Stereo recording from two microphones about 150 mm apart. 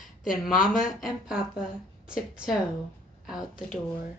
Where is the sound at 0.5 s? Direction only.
65° left (ahead or behind).